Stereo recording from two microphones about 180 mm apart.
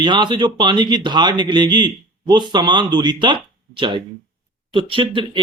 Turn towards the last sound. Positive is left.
turn(degrees=-30)  # may be behind; listen again after turning